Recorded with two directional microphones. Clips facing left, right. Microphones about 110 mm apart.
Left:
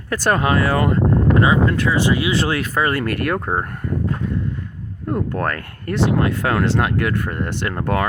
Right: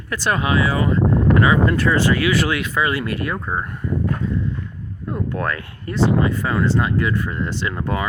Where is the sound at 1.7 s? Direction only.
Centre (ahead or behind).